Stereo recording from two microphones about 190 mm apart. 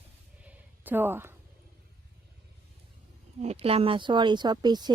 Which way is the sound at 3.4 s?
35° right (ahead or behind).